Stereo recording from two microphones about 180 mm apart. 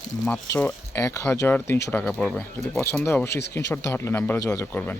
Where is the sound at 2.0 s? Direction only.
5° left (ahead or behind).